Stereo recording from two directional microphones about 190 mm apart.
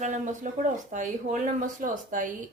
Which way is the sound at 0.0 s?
40° right (ahead or behind).